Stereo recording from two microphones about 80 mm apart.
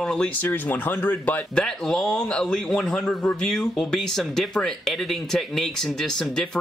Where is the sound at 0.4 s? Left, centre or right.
Left.